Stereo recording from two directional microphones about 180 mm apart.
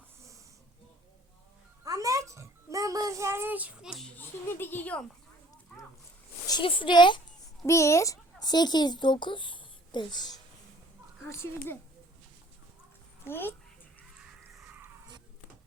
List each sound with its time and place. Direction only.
1.8 s a child's voice: 20° right (ahead or behind); by 4.1 s centre (ahead or behind)
4.2 s a child's voice: 10° left (ahead or behind)
6.5 s a child's voice: 30° left (ahead or behind)
13.2 s a child's voice: 10° left (ahead or behind)
14.2 s a sound: 5° right (ahead or behind)
14.8 s a sound: 25° right (ahead or behind)